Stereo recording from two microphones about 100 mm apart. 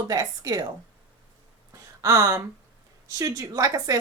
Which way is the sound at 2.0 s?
30° right (ahead or behind).